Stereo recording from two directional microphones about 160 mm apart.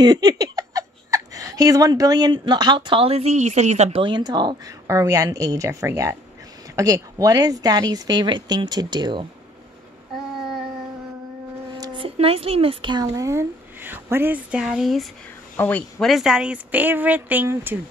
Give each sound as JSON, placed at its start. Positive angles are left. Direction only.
{"t": 0.0, "sound": "speech", "side_deg": -25}
{"t": 4.0, "sound": "a woman's voice", "side_deg": -25}
{"t": 11.7, "sound": "a woman's voice", "side_deg": -30}